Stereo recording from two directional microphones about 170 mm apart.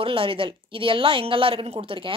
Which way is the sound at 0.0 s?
30° right (ahead or behind).